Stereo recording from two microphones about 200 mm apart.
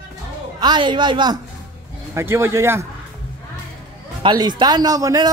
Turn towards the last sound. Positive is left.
turn(degrees=-20)  # may be behind; listen again after turning